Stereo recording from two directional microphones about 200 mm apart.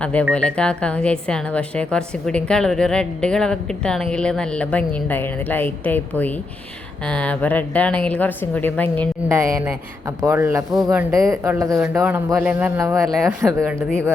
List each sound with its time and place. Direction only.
0.0 s a woman's voice: 5° left (ahead or behind)
9.3 s speech: 15° right (ahead or behind)